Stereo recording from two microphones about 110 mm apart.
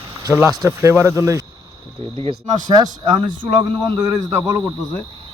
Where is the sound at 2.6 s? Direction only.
40° right (ahead or behind).